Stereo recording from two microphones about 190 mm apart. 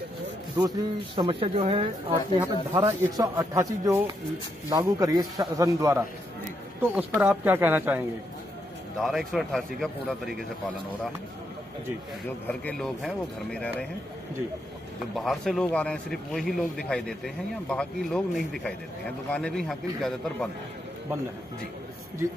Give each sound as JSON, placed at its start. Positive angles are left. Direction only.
{"t": 0.6, "sound": "speech", "side_deg": -25}
{"t": 2.7, "sound": "a man's voice", "side_deg": -15}
{"t": 9.0, "sound": "speech", "side_deg": 0}
{"t": 12.4, "sound": "speech", "side_deg": 5}
{"t": 15.1, "sound": "speech", "side_deg": 0}